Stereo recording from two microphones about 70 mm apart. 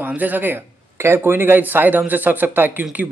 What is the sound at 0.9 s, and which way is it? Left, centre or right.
Speech, right.